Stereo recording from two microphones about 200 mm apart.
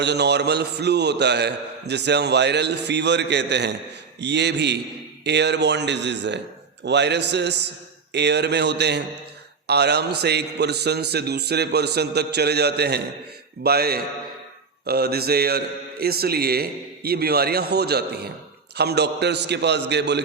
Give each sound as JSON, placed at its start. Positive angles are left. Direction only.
{"t": 0.0, "sound": "a man's voice", "side_deg": -55}